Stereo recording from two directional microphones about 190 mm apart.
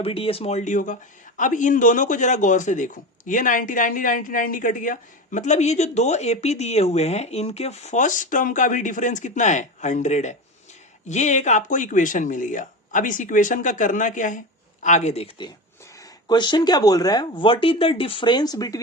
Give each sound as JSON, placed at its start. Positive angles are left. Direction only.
{"t": 0.0, "sound": "a man's voice", "side_deg": 30}